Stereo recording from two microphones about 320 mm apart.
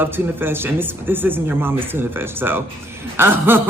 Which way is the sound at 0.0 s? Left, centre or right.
Centre.